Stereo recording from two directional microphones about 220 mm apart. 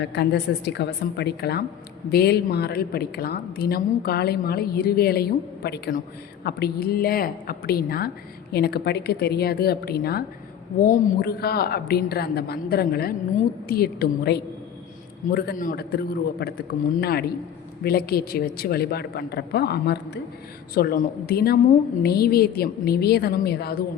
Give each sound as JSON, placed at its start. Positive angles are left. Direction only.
{"t": 0.0, "sound": "a woman's voice", "side_deg": 50}